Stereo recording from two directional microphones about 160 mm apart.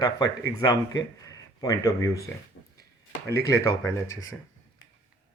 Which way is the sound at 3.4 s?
20° left (ahead or behind).